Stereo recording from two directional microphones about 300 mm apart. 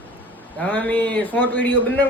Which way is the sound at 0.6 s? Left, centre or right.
Centre.